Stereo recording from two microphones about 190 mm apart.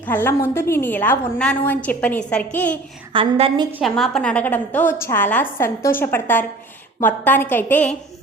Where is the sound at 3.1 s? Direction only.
30° right (ahead or behind).